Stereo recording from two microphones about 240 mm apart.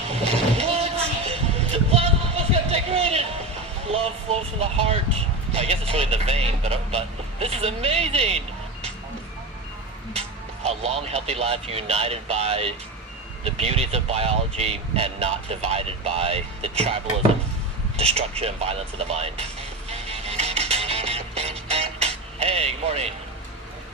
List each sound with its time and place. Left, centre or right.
0.1 s vehicle: right
5.5 s speech: right
10.7 s speech: right
19.9 s music: right